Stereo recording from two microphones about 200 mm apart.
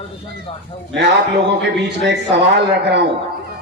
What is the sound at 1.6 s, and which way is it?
Speech, 60° right (ahead or behind).